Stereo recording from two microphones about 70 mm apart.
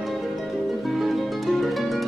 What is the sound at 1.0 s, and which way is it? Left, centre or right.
Music, centre.